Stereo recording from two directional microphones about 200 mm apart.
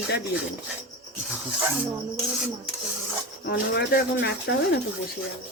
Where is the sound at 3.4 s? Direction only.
60° left (ahead or behind).